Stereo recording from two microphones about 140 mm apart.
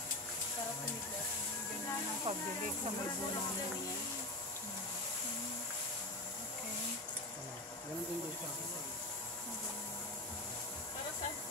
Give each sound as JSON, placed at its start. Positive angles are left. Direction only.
{"t": 2.3, "sound": "speech", "side_deg": -40}